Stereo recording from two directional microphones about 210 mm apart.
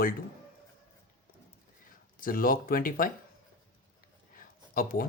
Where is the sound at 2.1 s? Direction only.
40° left (ahead or behind).